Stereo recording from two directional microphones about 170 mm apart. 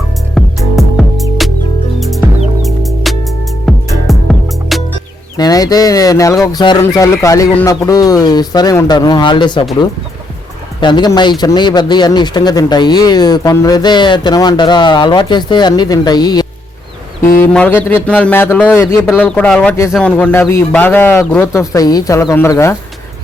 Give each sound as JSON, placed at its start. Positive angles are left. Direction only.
{"t": 0.3, "sound": "music", "side_deg": 0}
{"t": 5.4, "sound": "a man's voice", "side_deg": 20}
{"t": 10.8, "sound": "a man's voice", "side_deg": 25}
{"t": 17.3, "sound": "a man's voice", "side_deg": 10}